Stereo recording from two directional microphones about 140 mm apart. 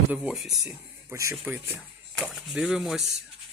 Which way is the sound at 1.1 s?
20° right (ahead or behind).